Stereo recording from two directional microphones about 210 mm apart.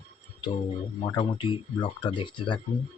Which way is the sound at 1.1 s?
20° left (ahead or behind).